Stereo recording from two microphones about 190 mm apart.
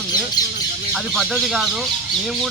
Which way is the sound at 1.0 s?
Centre (ahead or behind).